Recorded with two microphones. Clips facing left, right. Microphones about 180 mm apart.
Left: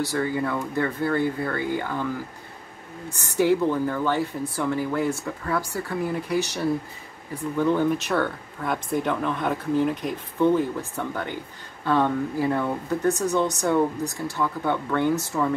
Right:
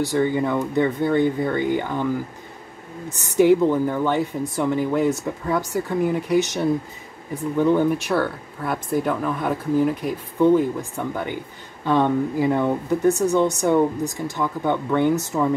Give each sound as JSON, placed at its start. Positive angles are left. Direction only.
{"t": 0.0, "sound": "speech", "side_deg": -15}
{"t": 3.3, "sound": "speech", "side_deg": -15}